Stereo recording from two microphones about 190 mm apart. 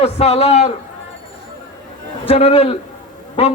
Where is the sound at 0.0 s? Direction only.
35° left (ahead or behind).